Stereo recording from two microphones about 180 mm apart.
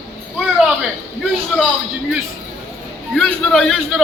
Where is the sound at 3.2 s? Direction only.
5° left (ahead or behind).